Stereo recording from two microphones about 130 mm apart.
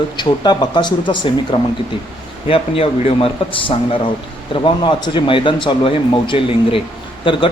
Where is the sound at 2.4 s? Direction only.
50° left (ahead or behind).